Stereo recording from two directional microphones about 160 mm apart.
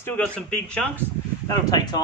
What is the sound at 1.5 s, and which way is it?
Speech, 25° left (ahead or behind).